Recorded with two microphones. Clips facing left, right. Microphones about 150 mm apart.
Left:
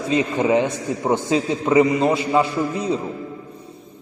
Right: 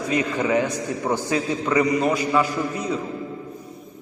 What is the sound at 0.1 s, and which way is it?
A man's voice, 25° left (ahead or behind).